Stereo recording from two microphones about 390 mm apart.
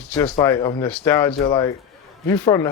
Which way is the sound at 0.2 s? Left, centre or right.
Centre.